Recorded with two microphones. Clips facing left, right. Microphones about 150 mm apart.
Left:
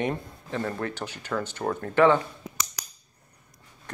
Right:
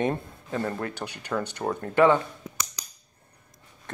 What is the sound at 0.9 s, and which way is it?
Speech, 15° right (ahead or behind).